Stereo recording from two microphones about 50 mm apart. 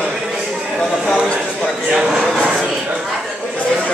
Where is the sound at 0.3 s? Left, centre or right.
Centre.